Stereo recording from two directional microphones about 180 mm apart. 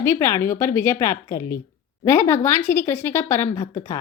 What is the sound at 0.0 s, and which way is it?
A woman's voice, 15° left (ahead or behind).